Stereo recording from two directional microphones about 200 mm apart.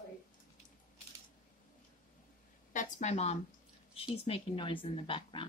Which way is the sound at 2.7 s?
40° left (ahead or behind).